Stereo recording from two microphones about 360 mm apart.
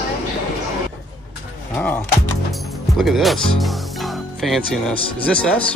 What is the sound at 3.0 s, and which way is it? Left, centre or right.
Speech, centre.